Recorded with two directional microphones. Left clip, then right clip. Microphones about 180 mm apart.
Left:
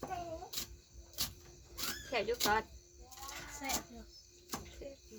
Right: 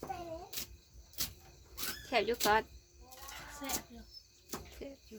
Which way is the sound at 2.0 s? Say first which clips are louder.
Right 3 dB; 60° right (ahead or behind).